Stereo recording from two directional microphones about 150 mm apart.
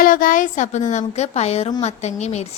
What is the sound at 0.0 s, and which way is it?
A woman's voice, 65° left (ahead or behind).